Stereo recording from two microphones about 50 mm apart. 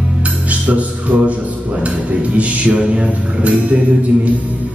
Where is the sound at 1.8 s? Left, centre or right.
Right.